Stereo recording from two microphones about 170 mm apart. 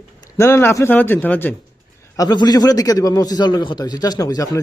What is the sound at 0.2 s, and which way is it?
Speech, 20° left (ahead or behind).